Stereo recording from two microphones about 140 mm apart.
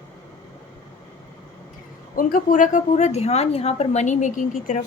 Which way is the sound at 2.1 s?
75° left (ahead or behind).